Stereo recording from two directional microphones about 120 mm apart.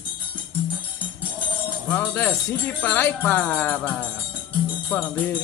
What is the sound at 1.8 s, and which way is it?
Music, 15° left (ahead or behind).